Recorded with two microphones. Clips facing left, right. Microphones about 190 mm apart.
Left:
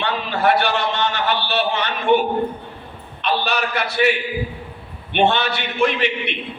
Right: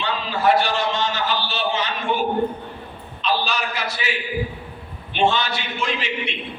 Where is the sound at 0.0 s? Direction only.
65° left (ahead or behind).